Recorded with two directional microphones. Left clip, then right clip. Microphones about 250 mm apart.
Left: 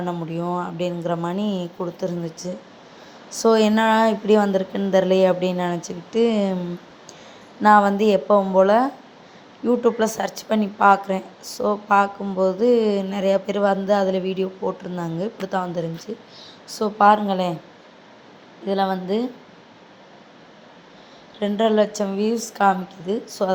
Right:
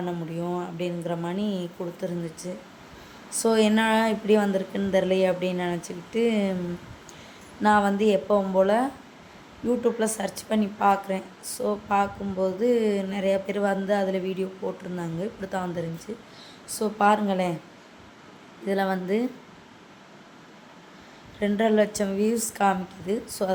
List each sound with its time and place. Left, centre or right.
0.0 s a woman's voice: centre
7.6 s a woman's voice: centre
18.6 s a woman's voice: centre
21.3 s a woman's voice: centre